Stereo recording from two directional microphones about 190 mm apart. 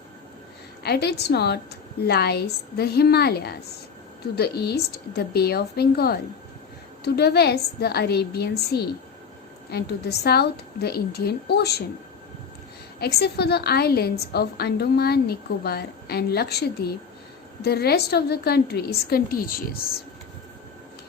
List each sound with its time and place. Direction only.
0.8 s a woman's voice: 60° left (ahead or behind)
13.0 s a woman's voice: 55° left (ahead or behind)